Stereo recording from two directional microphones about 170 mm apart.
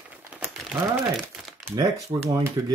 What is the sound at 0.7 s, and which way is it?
Speech, centre (ahead or behind).